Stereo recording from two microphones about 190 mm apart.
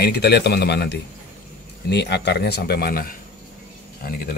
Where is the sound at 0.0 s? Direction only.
60° left (ahead or behind).